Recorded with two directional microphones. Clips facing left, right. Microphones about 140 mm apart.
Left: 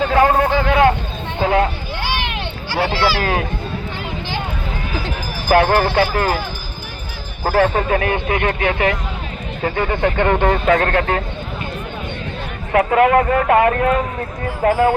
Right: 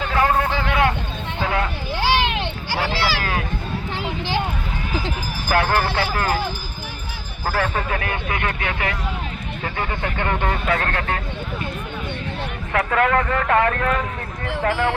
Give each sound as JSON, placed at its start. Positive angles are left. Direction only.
{"t": 0.0, "sound": "speech", "side_deg": 35}
{"t": 2.7, "sound": "speech", "side_deg": 40}
{"t": 5.5, "sound": "speech", "side_deg": 25}
{"t": 7.4, "sound": "speech", "side_deg": 30}
{"t": 12.7, "sound": "speech", "side_deg": 25}